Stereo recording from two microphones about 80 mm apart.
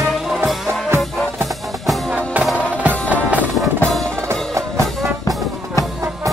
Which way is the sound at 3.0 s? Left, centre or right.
Centre.